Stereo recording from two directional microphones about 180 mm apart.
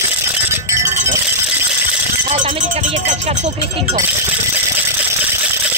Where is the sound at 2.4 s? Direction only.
40° right (ahead or behind).